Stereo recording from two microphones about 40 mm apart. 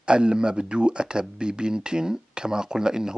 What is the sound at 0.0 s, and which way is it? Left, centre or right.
Speech, right.